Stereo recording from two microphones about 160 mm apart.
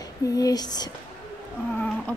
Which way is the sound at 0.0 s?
20° left (ahead or behind).